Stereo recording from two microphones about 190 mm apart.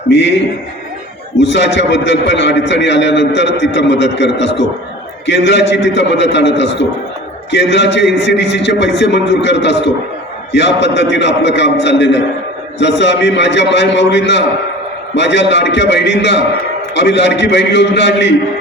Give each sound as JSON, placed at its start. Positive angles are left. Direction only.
{"t": 0.1, "sound": "a man's voice", "side_deg": 70}
{"t": 1.4, "sound": "a man's voice", "side_deg": 70}